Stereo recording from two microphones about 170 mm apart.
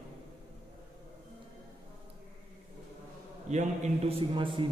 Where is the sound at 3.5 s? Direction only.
45° right (ahead or behind).